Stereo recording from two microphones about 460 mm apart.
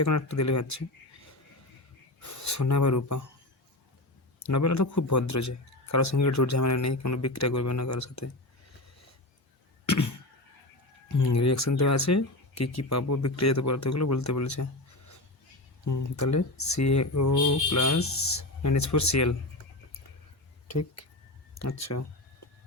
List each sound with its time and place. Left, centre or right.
0.0 s speech: left
2.2 s speech: left
4.4 s speech: left
9.8 s a sound: left
11.1 s speech: left
20.7 s speech: left